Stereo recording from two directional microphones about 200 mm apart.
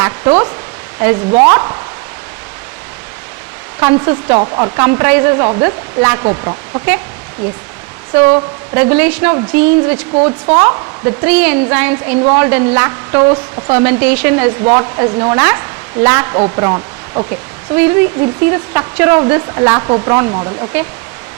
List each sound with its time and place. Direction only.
0.0 s speech: 10° right (ahead or behind)
4.0 s speech: 10° right (ahead or behind)
8.1 s speech: 10° right (ahead or behind)
10.2 s speech: 30° right (ahead or behind)
10.5 s speech: 10° right (ahead or behind)